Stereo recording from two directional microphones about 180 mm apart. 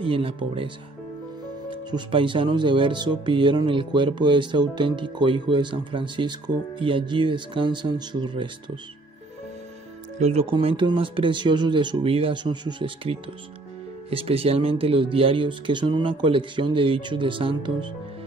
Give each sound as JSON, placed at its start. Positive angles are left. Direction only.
{"t": 0.0, "sound": "speech", "side_deg": -30}
{"t": 1.9, "sound": "speech", "side_deg": -25}
{"t": 10.1, "sound": "speech", "side_deg": -35}